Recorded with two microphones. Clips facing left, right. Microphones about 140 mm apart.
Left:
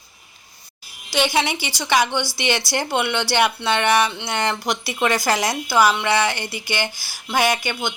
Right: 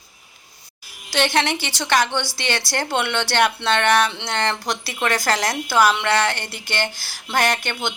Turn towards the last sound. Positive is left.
turn(degrees=5)  # may be behind; listen again after turning